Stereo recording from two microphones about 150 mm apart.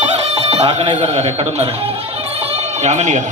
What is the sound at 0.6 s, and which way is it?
A man's voice, 45° right (ahead or behind).